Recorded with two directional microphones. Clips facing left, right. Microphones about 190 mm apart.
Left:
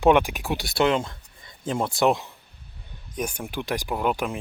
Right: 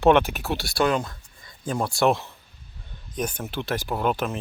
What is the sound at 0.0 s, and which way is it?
Speech, 15° left (ahead or behind).